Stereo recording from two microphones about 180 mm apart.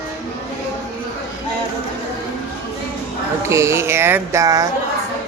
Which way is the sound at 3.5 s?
15° right (ahead or behind).